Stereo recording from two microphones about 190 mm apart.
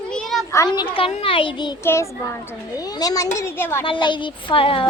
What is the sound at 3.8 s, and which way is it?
A child's voice, 25° left (ahead or behind).